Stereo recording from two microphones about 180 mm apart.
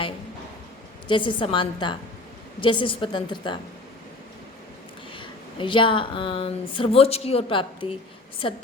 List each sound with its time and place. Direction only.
1.0 s speech: 25° left (ahead or behind)
5.1 s speech: 30° left (ahead or behind)